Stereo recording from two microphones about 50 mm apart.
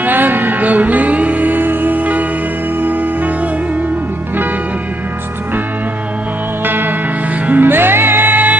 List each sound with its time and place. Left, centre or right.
0.0 s music: right
6.6 s music: right